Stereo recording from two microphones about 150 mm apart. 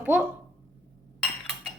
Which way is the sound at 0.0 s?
10° right (ahead or behind).